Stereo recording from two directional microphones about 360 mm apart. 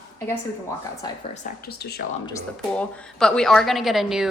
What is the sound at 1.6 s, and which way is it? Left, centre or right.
Speech, left.